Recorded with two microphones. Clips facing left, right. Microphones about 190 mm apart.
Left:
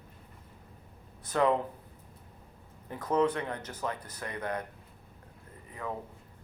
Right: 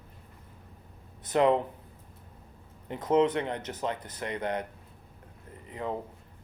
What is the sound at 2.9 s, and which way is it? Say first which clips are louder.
Speech: right 3 dB; 25° right (ahead or behind).